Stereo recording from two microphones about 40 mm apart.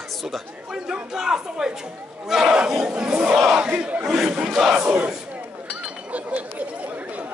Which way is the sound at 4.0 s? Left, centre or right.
Centre.